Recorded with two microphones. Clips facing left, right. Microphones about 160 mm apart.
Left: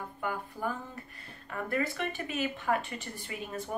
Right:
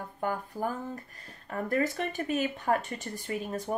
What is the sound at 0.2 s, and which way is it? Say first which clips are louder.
Speech: right 3 dB; 40° right (ahead or behind).